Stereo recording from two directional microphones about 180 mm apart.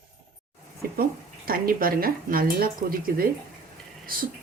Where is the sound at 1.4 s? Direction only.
55° right (ahead or behind).